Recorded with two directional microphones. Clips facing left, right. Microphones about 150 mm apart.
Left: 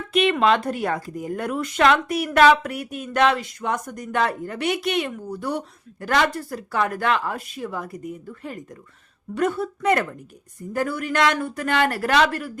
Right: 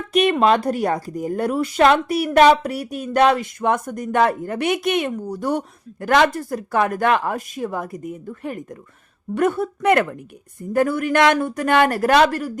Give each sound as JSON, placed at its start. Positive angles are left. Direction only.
{"t": 0.1, "sound": "a woman's voice", "side_deg": -40}
{"t": 10.8, "sound": "speech", "side_deg": -50}